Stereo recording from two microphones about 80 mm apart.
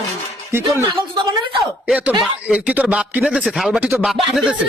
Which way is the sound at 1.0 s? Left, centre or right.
Right.